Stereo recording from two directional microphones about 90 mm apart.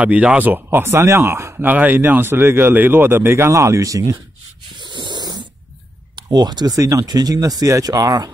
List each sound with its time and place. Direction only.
0.0 s speech: 15° right (ahead or behind); by 1.5 s 30° right (ahead or behind)
1.6 s speech: 20° right (ahead or behind); by 4.2 s 35° right (ahead or behind)
4.7 s a sound: 60° right (ahead or behind)
6.1 s speech: 50° right (ahead or behind)